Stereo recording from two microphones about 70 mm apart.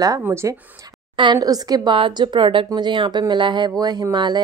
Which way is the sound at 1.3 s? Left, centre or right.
Right.